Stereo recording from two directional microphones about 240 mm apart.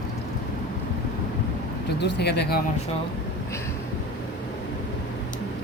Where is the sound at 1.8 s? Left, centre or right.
Left.